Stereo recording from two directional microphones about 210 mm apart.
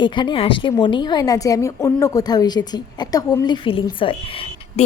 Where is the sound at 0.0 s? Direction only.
20° left (ahead or behind).